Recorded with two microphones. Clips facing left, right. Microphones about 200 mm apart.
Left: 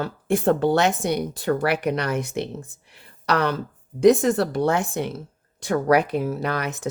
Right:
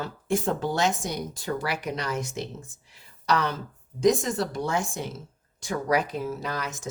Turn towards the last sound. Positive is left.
turn(degrees=60)  # may be behind; listen again after turning